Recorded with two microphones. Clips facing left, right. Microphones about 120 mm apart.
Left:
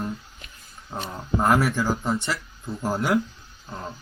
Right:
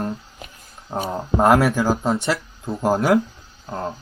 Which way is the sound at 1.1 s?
35° right (ahead or behind).